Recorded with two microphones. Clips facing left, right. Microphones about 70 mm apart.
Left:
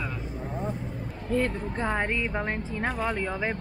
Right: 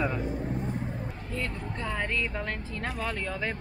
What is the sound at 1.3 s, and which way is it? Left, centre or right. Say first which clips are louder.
A woman's voice: left 9 dB; left.